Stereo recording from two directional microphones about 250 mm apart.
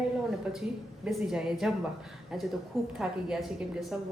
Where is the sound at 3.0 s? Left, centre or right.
Centre.